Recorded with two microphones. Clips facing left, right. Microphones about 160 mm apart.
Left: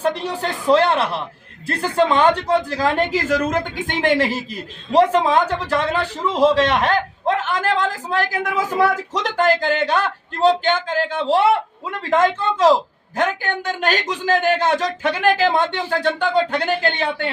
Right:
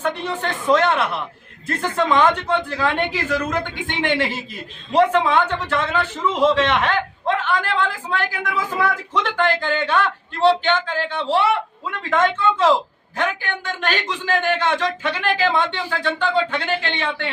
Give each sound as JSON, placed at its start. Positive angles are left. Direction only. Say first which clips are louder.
{"t": 0.0, "sound": "a man's voice", "louder": "left 2 dB", "side_deg": 35}